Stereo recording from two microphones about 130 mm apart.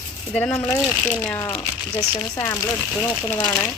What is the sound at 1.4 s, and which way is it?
Speech, 20° left (ahead or behind).